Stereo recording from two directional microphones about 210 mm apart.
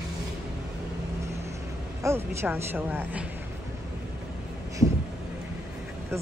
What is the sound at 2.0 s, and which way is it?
A woman's voice, 10° right (ahead or behind).